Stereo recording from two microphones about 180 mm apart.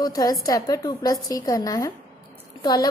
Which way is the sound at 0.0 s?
20° left (ahead or behind).